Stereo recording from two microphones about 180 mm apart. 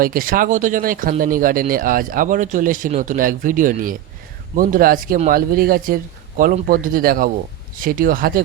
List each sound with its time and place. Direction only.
0.0 s speech: 50° right (ahead or behind)